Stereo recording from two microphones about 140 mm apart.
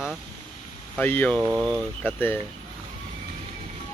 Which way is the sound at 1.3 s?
30° right (ahead or behind).